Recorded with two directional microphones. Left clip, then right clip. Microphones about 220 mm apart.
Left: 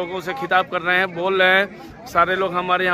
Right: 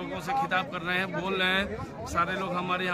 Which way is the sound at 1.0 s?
15° left (ahead or behind).